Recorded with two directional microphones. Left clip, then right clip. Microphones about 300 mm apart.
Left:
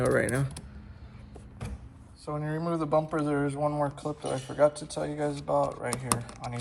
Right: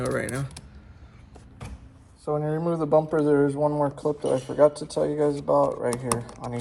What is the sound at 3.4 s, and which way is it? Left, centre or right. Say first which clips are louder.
Speech: right 6 dB; right.